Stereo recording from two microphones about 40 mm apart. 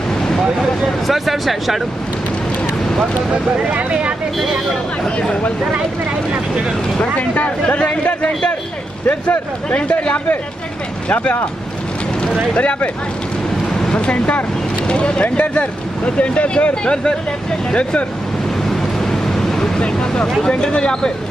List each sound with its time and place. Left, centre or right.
1.0 s speech: centre
3.6 s speech: right
7.2 s speech: left
9.7 s speech: left
12.5 s speech: left
13.9 s speech: left
17.6 s speech: left
18.7 s vehicle: centre
20.4 s speech: left